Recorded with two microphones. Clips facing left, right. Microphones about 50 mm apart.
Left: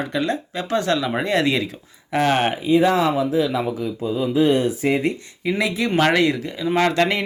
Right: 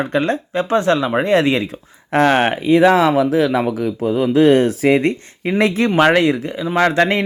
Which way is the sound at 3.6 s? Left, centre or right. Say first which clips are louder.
Right 5 dB; right.